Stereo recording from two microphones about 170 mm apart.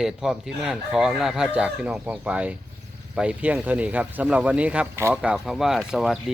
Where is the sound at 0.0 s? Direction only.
5° right (ahead or behind).